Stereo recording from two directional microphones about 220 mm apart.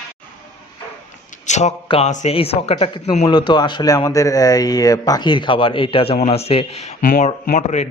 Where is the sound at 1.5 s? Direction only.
30° left (ahead or behind).